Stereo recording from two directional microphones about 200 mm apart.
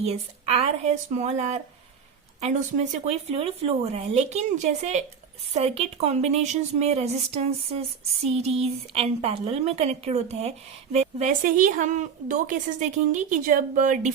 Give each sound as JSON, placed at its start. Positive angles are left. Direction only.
{"t": 0.0, "sound": "a woman's voice", "side_deg": -30}